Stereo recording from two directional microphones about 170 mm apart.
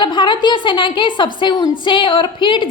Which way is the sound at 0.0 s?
25° left (ahead or behind).